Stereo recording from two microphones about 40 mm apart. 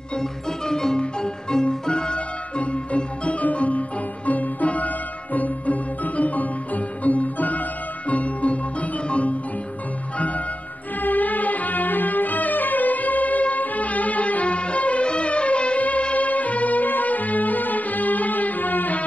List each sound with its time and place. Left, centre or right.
0.1 s music: centre; by 19.0 s left